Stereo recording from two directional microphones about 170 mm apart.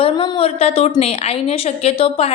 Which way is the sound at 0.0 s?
35° left (ahead or behind).